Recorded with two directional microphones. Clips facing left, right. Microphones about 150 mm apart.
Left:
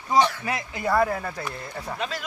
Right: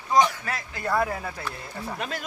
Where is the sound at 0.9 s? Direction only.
Centre (ahead or behind).